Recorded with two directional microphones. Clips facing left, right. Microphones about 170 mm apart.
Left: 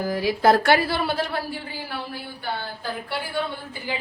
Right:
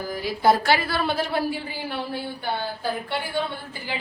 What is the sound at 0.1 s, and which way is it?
Speech, 90° left.